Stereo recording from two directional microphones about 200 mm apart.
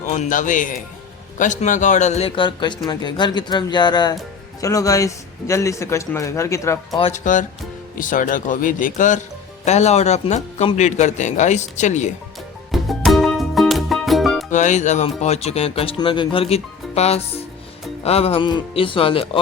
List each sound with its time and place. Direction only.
0.1 s a man's voice: 40° left (ahead or behind); by 7.0 s 15° left (ahead or behind)
7.0 s speech: 40° left (ahead or behind)
12.7 s music: centre (ahead or behind)
14.5 s a man's voice: 35° left (ahead or behind)